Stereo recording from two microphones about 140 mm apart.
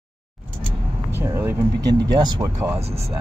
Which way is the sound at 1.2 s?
20° right (ahead or behind).